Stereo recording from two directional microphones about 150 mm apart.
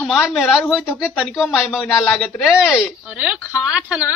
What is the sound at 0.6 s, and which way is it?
Speech, 20° left (ahead or behind).